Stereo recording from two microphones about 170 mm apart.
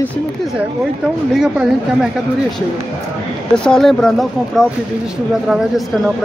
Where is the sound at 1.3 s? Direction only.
5° right (ahead or behind).